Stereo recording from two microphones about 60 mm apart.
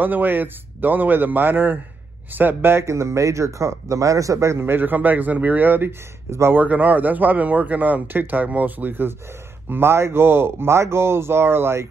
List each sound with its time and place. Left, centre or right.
0.0 s a man's voice: right
4.6 s speech: right